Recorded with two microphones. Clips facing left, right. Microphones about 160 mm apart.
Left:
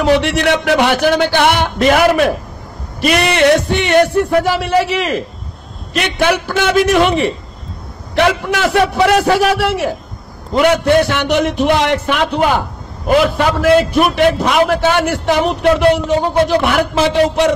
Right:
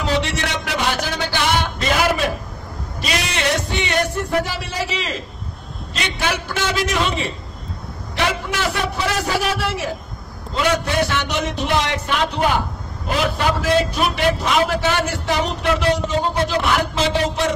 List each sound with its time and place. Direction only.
0.0 s a man's voice: 65° left (ahead or behind)
13.7 s a man's voice: 60° left (ahead or behind)